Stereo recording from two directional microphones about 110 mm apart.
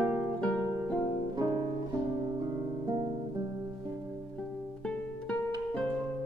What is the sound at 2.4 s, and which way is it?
Guitar, 35° right (ahead or behind).